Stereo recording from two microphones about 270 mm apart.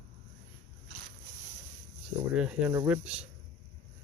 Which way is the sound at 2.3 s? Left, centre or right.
Centre.